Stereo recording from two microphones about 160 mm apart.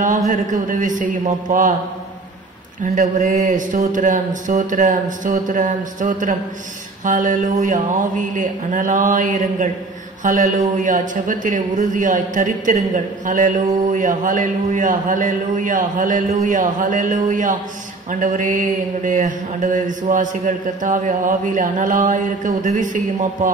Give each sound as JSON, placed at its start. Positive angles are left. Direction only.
{"t": 0.0, "sound": "a man's voice", "side_deg": -55}
{"t": 2.8, "sound": "mantra", "side_deg": -50}
{"t": 10.2, "sound": "a man's voice", "side_deg": -55}
{"t": 18.2, "sound": "mantra", "side_deg": -55}